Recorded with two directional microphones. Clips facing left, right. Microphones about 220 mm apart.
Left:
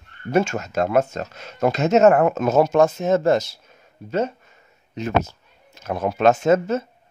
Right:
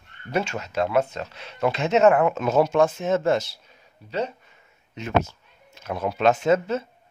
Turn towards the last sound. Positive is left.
turn(degrees=45)  # may be behind; listen again after turning